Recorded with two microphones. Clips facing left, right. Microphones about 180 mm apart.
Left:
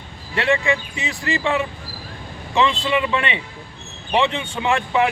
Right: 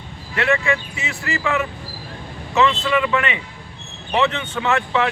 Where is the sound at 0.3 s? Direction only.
20° left (ahead or behind).